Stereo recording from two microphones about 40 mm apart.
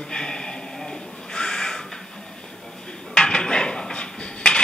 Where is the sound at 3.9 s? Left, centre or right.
Left.